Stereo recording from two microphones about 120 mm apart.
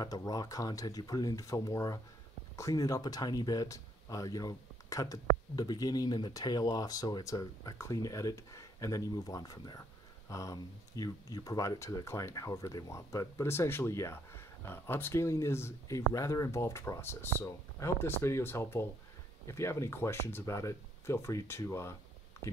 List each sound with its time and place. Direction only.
0.0 s speech: 30° left (ahead or behind)